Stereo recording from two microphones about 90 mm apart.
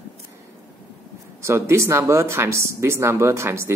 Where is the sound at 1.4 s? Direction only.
30° right (ahead or behind).